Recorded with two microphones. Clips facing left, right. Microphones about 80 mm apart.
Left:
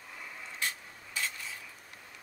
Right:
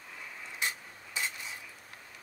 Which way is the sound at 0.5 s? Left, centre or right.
Centre.